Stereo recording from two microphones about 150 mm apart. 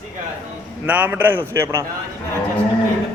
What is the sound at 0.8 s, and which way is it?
A man's voice, 10° right (ahead or behind).